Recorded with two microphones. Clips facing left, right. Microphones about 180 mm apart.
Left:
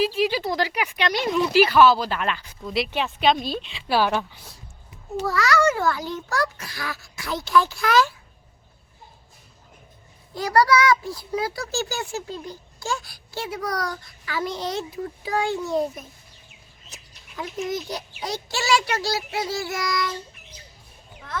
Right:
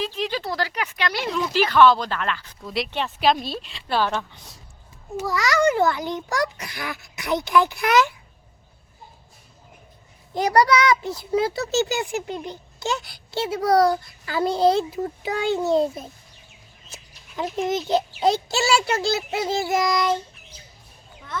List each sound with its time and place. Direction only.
0.0 s speech: 10° left (ahead or behind)
1.3 s speech: 10° left (ahead or behind)
2.6 s a woman's voice: centre (ahead or behind)
5.2 s a child's voice: 15° right (ahead or behind)
10.3 s a child's voice: 20° right (ahead or behind)